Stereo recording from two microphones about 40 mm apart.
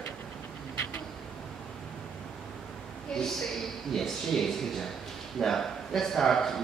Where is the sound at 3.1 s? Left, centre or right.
Centre.